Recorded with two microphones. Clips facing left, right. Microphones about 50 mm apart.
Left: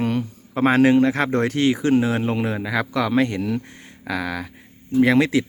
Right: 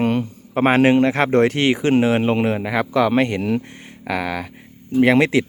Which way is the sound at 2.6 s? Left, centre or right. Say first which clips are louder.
Right 4 dB; right.